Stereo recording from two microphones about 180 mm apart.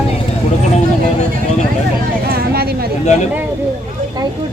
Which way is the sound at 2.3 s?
60° right (ahead or behind).